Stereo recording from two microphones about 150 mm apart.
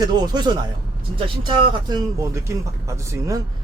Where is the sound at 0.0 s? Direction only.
30° right (ahead or behind).